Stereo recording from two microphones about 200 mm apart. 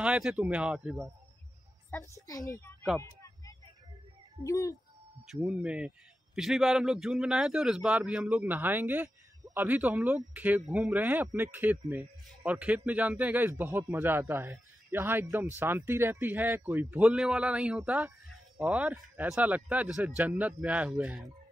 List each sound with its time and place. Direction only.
0.0 s speech: 5° right (ahead or behind)
1.9 s a child's voice: 15° left (ahead or behind)
3.0 s a sound: 15° left (ahead or behind)
4.5 s speech: 15° left (ahead or behind)
5.2 s a man's voice: 5° right (ahead or behind)